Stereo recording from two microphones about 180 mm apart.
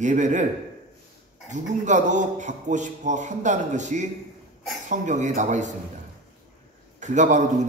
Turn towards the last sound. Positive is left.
turn(degrees=-40)  # may be behind; listen again after turning